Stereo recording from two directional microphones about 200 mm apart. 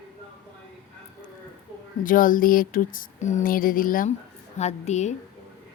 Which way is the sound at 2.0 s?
45° left (ahead or behind).